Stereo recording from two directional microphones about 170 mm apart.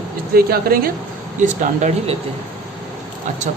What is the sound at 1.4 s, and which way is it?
Speech, 45° right (ahead or behind).